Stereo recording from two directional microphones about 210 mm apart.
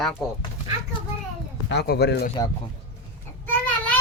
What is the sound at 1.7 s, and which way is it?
Speech, 50° left (ahead or behind).